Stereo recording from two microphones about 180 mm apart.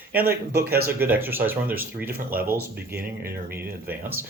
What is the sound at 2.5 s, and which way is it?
Speech, 55° right (ahead or behind).